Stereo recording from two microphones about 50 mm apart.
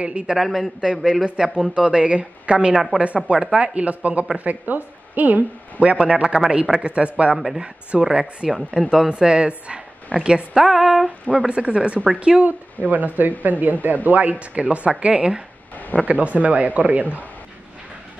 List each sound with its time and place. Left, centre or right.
0.0 s a woman's voice: right
0.4 s a man's voice: centre
1.2 s a woman's voice: centre
2.7 s a woman's voice: centre
3.5 s a woman's voice: right
7.3 s a man's voice: centre
7.6 s a woman's voice: centre
15.7 s a sound: left
16.1 s speech: right